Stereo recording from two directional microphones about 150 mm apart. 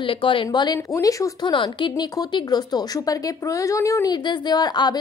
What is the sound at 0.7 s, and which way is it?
Speech, 20° left (ahead or behind).